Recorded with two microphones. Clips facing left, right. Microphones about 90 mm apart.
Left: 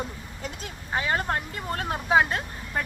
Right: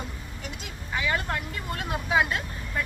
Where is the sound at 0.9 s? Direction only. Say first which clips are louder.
Left 2 dB; 35° left (ahead or behind).